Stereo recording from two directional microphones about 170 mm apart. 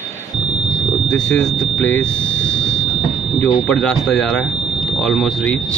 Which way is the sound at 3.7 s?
Centre (ahead or behind).